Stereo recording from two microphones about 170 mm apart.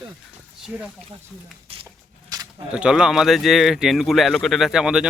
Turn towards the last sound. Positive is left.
turn(degrees=-5)  # may be behind; listen again after turning